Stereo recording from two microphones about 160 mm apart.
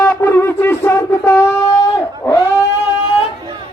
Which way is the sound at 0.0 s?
15° left (ahead or behind).